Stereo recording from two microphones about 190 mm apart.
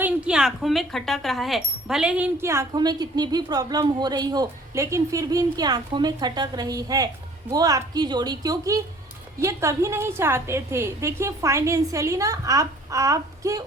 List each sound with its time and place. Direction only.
0.0 s a woman's voice: 5° right (ahead or behind)